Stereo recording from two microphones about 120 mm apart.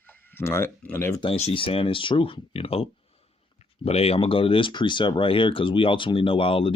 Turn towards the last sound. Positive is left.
turn(degrees=50)  # may be behind; listen again after turning